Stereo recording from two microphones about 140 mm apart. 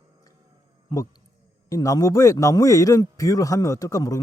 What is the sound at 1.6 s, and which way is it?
A man's voice, 25° left (ahead or behind).